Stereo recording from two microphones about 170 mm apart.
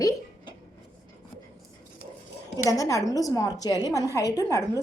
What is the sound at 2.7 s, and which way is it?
A woman's voice, 20° left (ahead or behind).